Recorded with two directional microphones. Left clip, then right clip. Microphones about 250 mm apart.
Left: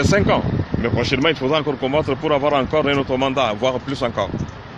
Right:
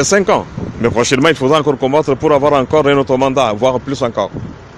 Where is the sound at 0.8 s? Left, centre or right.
Right.